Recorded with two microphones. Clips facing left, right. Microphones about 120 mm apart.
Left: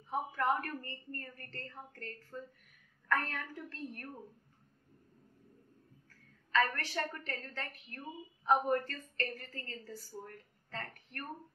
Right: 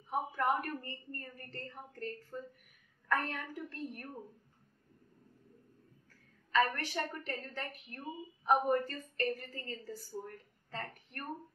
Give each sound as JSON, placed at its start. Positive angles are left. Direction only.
{"t": 0.1, "sound": "a woman's voice", "side_deg": -15}
{"t": 6.5, "sound": "a woman's voice", "side_deg": -15}